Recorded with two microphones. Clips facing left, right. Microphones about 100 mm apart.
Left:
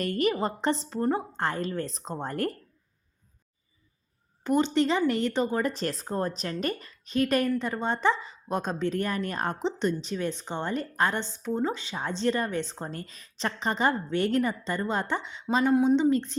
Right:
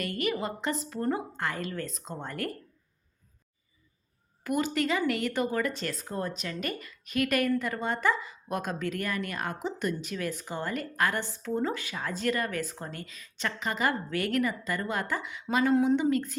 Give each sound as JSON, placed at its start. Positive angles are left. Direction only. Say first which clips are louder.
{"t": 0.0, "sound": "a woman's voice", "louder": "left 4 dB", "side_deg": 35}
{"t": 1.4, "sound": "a woman's voice", "louder": "left 4 dB", "side_deg": 35}
{"t": 4.4, "sound": "a woman's voice", "louder": "left 4 dB", "side_deg": 25}